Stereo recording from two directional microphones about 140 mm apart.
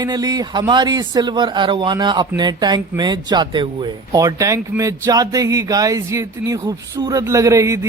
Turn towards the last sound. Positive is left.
turn(degrees=-20)  # may be behind; listen again after turning